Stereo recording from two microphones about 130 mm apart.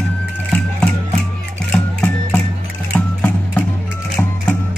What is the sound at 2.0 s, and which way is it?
Music, 15° left (ahead or behind).